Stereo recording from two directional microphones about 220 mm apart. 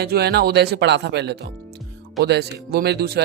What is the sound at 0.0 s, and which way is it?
Speech, 45° right (ahead or behind).